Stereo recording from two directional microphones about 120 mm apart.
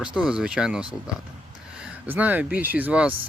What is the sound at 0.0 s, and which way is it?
Speech, 5° right (ahead or behind).